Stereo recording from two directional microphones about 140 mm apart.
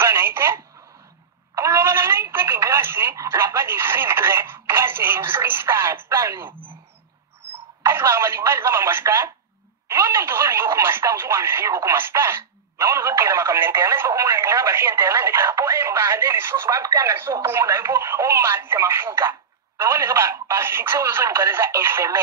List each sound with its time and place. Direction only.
0.0 s telephone: 15° right (ahead or behind)
7.8 s telephone: 15° right (ahead or behind)
9.8 s speech: 15° right (ahead or behind)